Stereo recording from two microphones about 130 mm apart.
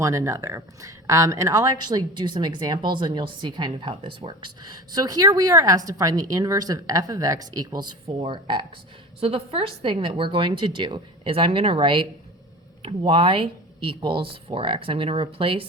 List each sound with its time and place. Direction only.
0.0 s speech: 25° right (ahead or behind); by 15.6 s 45° right (ahead or behind)